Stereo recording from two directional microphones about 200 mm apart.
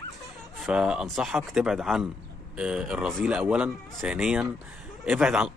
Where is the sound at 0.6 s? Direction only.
5° right (ahead or behind).